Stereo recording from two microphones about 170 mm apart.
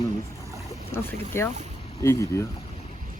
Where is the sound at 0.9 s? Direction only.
15° left (ahead or behind).